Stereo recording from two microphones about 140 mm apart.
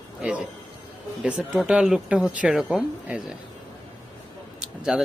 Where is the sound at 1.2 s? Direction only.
10° right (ahead or behind).